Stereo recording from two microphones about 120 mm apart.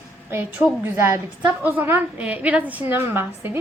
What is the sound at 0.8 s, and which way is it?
A woman's voice, 20° right (ahead or behind).